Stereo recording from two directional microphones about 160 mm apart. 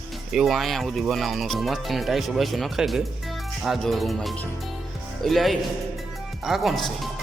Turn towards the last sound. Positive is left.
turn(degrees=0)  # may be behind; listen again after turning